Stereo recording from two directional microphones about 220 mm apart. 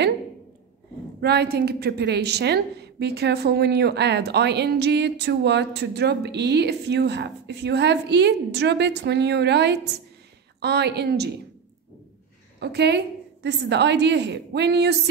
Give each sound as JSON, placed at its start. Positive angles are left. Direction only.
{"t": 1.2, "sound": "a woman's voice", "side_deg": -45}
{"t": 12.5, "sound": "a woman's voice", "side_deg": -50}